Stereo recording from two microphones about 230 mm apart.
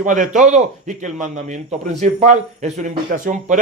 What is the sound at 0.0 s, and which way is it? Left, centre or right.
A man's voice, right.